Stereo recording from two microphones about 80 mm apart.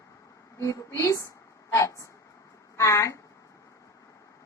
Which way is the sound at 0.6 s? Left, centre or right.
Left.